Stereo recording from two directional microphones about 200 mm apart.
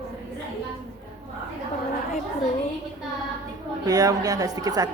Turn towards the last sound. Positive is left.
turn(degrees=-20)  # may be behind; listen again after turning